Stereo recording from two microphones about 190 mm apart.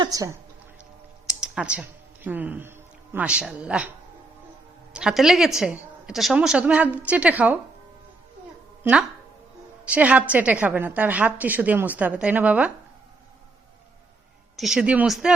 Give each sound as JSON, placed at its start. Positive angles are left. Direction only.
{"t": 0.0, "sound": "a woman's voice", "side_deg": -20}
{"t": 1.4, "sound": "speech", "side_deg": -5}
{"t": 4.9, "sound": "a woman's voice", "side_deg": -5}
{"t": 8.8, "sound": "a woman's voice", "side_deg": -5}
{"t": 14.5, "sound": "a woman's voice", "side_deg": 0}